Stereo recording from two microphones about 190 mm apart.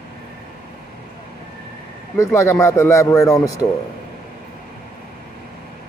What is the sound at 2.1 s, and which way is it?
A man's voice, 15° left (ahead or behind).